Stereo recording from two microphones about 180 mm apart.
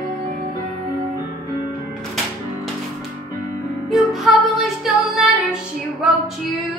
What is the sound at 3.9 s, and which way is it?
Music, centre (ahead or behind).